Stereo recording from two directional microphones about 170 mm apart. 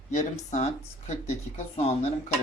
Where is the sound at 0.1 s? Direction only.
40° left (ahead or behind).